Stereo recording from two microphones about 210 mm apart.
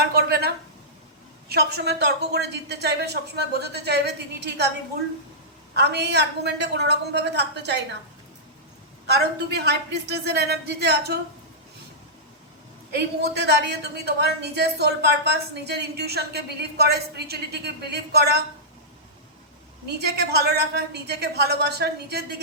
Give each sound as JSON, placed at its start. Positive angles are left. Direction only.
{"t": 0.0, "sound": "a sound", "side_deg": -50}
{"t": 1.5, "sound": "a woman's voice", "side_deg": -50}
{"t": 5.7, "sound": "a woman's voice", "side_deg": -50}
{"t": 9.1, "sound": "a woman's voice", "side_deg": -50}
{"t": 12.9, "sound": "a woman's voice", "side_deg": -50}
{"t": 19.9, "sound": "a woman's voice", "side_deg": -50}